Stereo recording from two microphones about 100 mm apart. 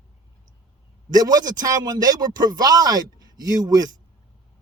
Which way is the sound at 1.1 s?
40° right (ahead or behind).